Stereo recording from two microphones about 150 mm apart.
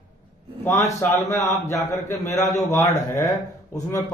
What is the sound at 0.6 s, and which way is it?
A man's voice, 20° left (ahead or behind).